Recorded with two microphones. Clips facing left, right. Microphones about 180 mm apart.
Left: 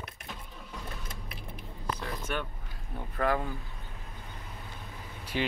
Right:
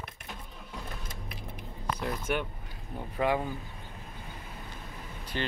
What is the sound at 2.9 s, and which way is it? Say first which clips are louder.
Speech: right 1 dB; 15° right (ahead or behind).